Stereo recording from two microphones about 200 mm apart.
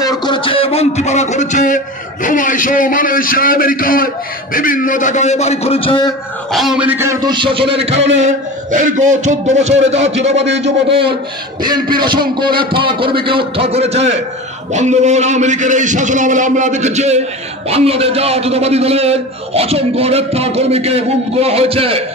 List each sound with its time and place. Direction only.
0.0 s a sound: 20° left (ahead or behind); by 1.8 s 40° left (ahead or behind)
2.2 s a man's voice: 40° left (ahead or behind); by 6.1 s 25° left (ahead or behind)
6.5 s a man's voice: centre (ahead or behind); by 9.9 s 35° right (ahead or behind)
10.3 s a man's voice: 60° right (ahead or behind)
10.9 s a man's voice: 25° right (ahead or behind)